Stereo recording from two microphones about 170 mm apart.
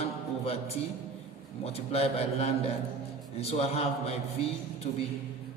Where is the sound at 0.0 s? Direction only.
35° left (ahead or behind).